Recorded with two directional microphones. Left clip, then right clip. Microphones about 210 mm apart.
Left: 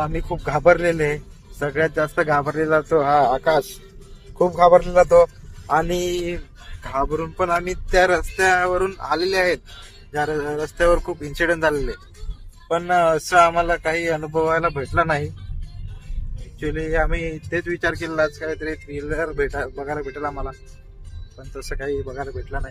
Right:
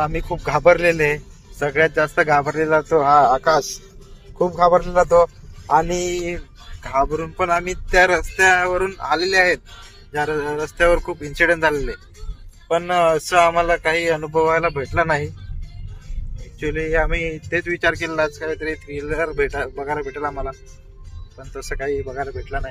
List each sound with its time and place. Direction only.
0.0 s speech: centre (ahead or behind); by 3.4 s 20° left (ahead or behind)
4.5 s speech: 35° left (ahead or behind)
5.7 s speech: 15° left (ahead or behind)
6.2 s speech: centre (ahead or behind)
16.5 s speech: centre (ahead or behind)
21.7 s speech: 5° left (ahead or behind)